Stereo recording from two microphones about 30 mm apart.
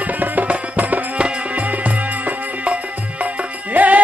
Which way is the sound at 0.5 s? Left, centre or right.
Right.